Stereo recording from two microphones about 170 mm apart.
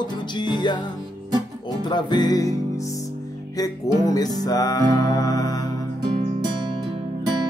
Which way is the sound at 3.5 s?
20° left (ahead or behind).